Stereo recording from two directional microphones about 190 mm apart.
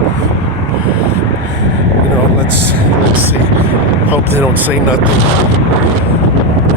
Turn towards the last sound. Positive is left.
turn(degrees=-10)  # may be behind; listen again after turning